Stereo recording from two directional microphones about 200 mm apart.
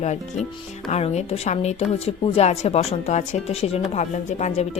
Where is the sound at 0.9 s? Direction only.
30° left (ahead or behind).